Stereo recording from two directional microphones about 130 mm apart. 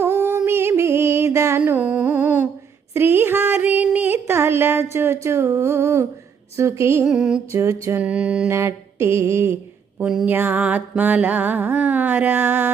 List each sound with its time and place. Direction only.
0.0 s music: 20° right (ahead or behind)
2.9 s a sound: 15° right (ahead or behind)
6.6 s mantra: 20° right (ahead or behind)
7.0 s music: 5° right (ahead or behind)
7.5 s mantra: 20° right (ahead or behind)
7.9 s music: 10° right (ahead or behind)
8.4 s mantra: 20° right (ahead or behind)
10.2 s music: 15° right (ahead or behind)